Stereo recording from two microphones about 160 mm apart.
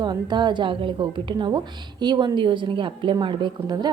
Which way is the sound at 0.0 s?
25° right (ahead or behind).